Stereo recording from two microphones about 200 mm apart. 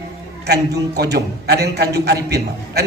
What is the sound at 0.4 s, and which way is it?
A man's voice, 55° right (ahead or behind).